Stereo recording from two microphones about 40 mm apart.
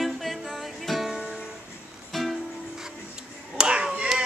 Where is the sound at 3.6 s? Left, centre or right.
Right.